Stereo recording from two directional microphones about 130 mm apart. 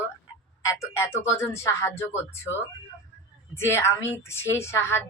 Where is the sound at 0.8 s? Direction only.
20° left (ahead or behind).